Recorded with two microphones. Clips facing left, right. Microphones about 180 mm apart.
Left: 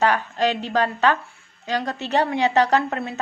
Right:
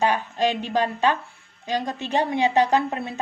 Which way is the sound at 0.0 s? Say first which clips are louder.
Left 1 dB; 15° right (ahead or behind).